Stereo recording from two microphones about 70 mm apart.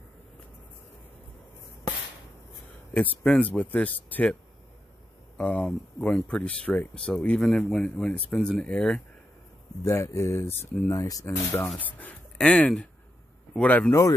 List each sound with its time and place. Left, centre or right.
2.9 s speech: centre
5.4 s speech: centre
9.8 s speech: left
10.9 s speech: left
11.2 s speech: left
12.4 s speech: centre